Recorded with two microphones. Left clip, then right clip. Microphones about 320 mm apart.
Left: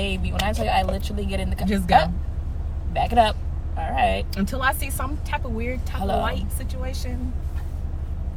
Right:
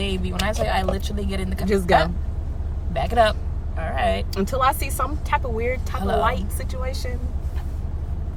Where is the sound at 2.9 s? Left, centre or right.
Centre.